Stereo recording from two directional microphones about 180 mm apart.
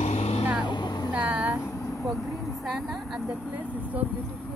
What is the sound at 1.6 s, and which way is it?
Vehicle, 15° left (ahead or behind).